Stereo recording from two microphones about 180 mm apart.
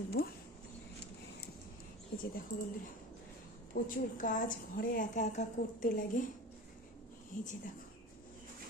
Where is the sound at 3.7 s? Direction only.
45° left (ahead or behind).